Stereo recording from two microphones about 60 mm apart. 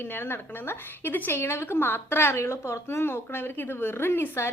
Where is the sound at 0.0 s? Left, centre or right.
Left.